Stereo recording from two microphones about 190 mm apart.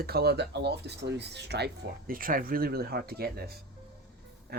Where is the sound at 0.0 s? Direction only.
55° right (ahead or behind).